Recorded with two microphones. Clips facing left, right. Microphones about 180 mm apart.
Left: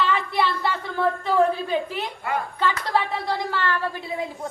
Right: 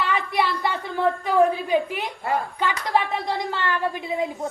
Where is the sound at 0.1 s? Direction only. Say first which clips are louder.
Even; 15° right (ahead or behind).